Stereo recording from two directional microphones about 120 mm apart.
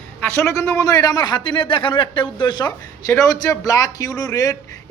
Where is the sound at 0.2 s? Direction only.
20° left (ahead or behind); by 2.7 s 40° left (ahead or behind).